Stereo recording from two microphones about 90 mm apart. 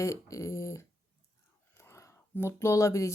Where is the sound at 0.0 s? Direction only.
35° left (ahead or behind).